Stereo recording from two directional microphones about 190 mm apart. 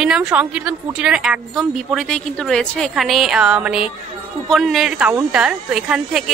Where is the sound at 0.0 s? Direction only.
5° right (ahead or behind).